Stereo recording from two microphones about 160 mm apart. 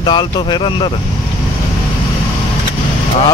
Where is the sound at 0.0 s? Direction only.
30° left (ahead or behind).